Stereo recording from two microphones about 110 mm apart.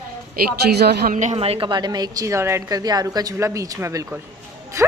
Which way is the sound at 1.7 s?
40° right (ahead or behind).